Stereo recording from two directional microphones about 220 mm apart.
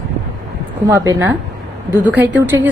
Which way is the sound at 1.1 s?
10° right (ahead or behind).